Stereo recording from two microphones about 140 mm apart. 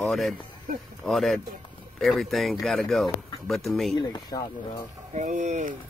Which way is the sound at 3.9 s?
30° left (ahead or behind).